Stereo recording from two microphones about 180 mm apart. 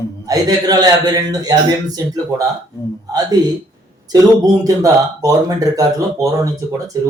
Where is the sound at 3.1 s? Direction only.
20° right (ahead or behind).